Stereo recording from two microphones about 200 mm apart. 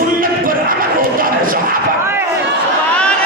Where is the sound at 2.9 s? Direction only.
5° left (ahead or behind).